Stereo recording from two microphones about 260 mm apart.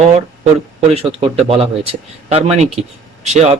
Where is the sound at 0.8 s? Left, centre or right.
Right.